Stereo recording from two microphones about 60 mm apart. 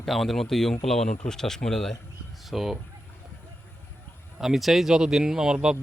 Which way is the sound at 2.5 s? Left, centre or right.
Centre.